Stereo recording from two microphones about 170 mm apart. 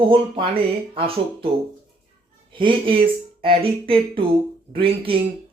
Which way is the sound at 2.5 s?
30° right (ahead or behind).